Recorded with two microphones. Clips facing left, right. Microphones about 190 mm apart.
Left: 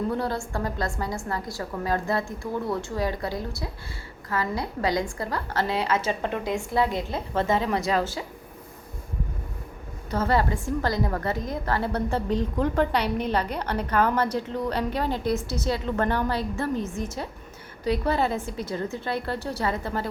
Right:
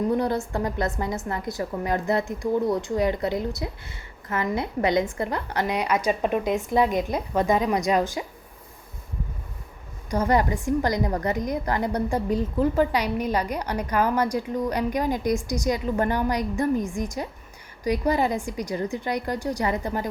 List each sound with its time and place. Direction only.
0.1 s a woman's voice: 20° right (ahead or behind)
10.1 s a woman's voice: 15° right (ahead or behind)